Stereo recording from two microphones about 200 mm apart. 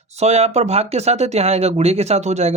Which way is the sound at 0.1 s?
35° right (ahead or behind).